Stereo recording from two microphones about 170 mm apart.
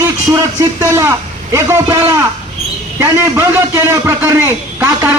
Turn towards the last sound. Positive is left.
turn(degrees=-15)  # may be behind; listen again after turning